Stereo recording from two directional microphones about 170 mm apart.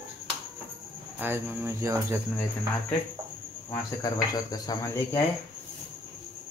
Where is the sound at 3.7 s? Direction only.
20° left (ahead or behind).